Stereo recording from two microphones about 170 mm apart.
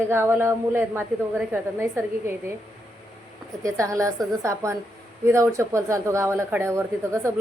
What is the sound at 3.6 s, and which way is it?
A woman's voice, 20° right (ahead or behind).